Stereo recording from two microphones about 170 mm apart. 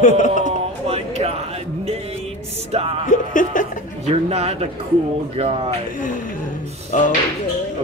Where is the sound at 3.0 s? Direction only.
50° left (ahead or behind).